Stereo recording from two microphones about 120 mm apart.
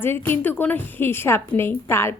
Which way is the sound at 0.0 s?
20° left (ahead or behind).